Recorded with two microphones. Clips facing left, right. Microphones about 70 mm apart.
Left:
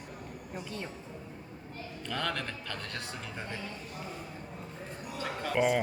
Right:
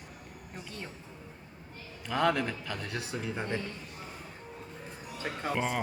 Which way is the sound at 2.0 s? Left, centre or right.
Centre.